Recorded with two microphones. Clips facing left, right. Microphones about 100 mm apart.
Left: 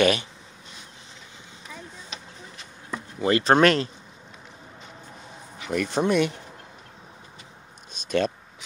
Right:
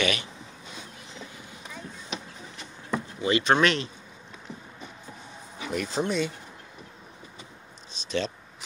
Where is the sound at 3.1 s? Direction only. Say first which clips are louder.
Left 4 dB; 45° left (ahead or behind).